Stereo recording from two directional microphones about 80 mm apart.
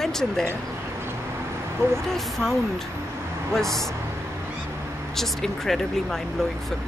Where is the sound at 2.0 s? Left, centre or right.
Centre.